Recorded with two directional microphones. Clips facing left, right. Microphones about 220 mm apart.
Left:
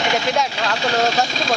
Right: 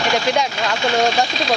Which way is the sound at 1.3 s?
45° left (ahead or behind).